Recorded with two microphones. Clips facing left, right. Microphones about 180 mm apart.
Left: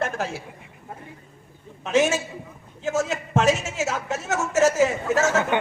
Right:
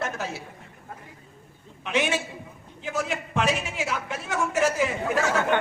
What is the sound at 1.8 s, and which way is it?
A man's voice, 45° left (ahead or behind).